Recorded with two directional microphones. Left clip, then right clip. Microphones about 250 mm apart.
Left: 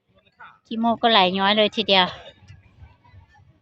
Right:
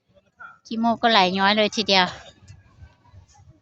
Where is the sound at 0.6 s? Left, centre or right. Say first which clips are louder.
Left 1 dB; centre.